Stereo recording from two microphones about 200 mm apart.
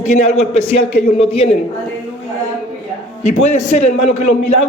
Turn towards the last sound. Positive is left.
turn(degrees=35)  # may be behind; listen again after turning